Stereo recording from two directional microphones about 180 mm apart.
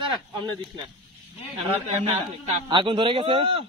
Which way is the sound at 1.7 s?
35° right (ahead or behind).